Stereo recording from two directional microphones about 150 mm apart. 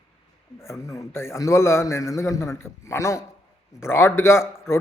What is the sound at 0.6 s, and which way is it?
A man's voice, 20° left (ahead or behind).